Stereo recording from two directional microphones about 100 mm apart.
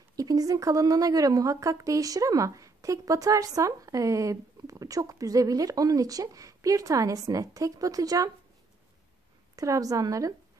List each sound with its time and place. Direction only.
0.1 s a woman's voice: 40° right (ahead or behind)
9.6 s a woman's voice: 35° right (ahead or behind)